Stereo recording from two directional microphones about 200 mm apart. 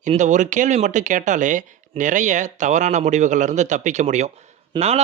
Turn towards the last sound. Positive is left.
turn(degrees=-30)  # may be behind; listen again after turning